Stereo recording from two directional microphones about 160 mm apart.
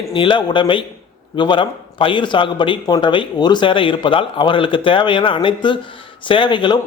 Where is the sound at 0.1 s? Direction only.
30° left (ahead or behind).